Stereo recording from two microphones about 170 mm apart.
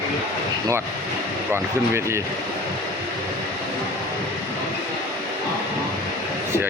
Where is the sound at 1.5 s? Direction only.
15° right (ahead or behind).